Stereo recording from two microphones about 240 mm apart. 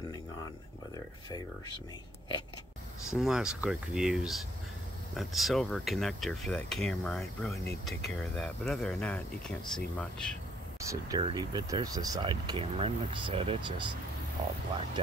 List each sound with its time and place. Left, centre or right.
3.1 s speech: centre
10.9 s speech: centre